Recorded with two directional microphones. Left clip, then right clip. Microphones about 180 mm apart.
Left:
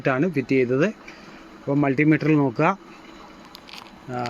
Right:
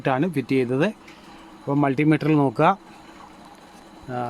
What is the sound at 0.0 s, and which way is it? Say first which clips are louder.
Speech: left 1 dB; 15° right (ahead or behind).